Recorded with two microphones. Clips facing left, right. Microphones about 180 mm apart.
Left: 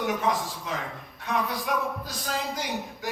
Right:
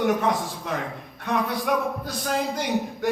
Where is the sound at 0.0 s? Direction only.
60° right (ahead or behind).